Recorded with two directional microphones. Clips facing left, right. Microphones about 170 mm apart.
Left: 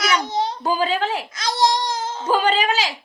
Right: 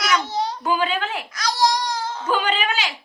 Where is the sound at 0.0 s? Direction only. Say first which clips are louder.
Left 1 dB; 15° left (ahead or behind).